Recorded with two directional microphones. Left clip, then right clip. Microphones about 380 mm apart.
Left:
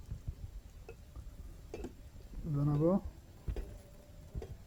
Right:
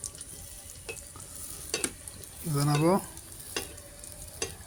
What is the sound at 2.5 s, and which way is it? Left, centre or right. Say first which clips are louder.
Speech: right 7 dB; left.